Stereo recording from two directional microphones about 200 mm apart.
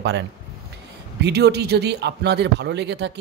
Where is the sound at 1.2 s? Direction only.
55° right (ahead or behind).